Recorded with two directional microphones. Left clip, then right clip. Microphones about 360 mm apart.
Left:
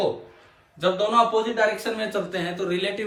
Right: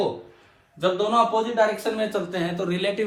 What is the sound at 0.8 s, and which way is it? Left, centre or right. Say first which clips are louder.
A man's voice: left 1 dB; centre.